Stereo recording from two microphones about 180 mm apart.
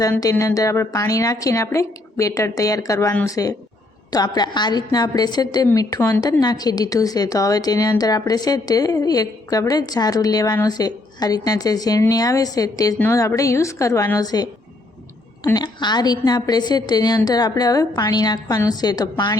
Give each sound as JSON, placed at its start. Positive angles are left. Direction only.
{"t": 0.0, "sound": "a woman's voice", "side_deg": 20}
{"t": 15.5, "sound": "a woman's voice", "side_deg": 25}